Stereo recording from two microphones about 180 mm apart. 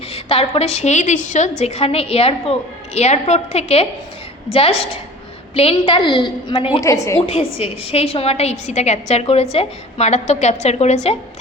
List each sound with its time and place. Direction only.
0.1 s a woman's voice: 30° left (ahead or behind)
6.8 s a woman's voice: 15° left (ahead or behind)
7.3 s a woman's voice: 35° left (ahead or behind)